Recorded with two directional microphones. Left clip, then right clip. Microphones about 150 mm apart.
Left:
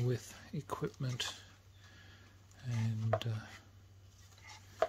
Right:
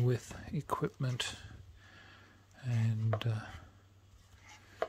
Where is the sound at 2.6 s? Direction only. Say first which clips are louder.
Right 3 dB; 45° right (ahead or behind).